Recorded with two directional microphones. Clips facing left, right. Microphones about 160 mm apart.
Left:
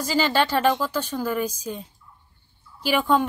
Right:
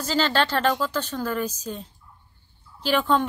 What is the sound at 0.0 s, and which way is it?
Speech, 10° left (ahead or behind).